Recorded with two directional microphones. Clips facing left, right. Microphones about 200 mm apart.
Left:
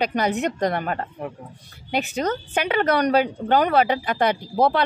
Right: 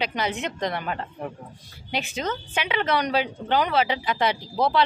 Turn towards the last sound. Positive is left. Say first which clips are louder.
# left 2 dB
turn(degrees=55)  # may be behind; listen again after turning